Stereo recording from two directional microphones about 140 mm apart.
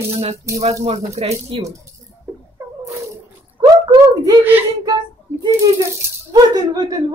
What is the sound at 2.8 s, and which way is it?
Cat, 20° right (ahead or behind).